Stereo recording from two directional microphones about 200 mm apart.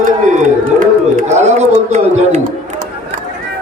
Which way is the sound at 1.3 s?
35° right (ahead or behind).